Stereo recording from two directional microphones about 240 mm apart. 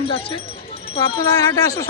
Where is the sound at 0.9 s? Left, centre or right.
Centre.